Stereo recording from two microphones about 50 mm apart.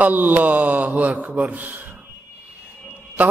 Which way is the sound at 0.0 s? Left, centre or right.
Right.